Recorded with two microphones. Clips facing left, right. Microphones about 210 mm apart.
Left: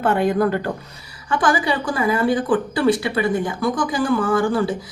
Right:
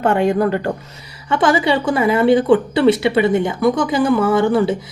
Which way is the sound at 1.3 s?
25° right (ahead or behind).